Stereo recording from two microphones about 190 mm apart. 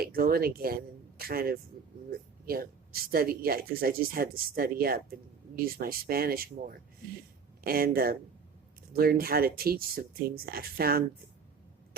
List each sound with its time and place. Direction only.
0.0 s speech: 50° right (ahead or behind)